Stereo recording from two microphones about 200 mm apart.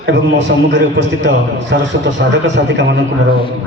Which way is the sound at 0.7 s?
60° right (ahead or behind).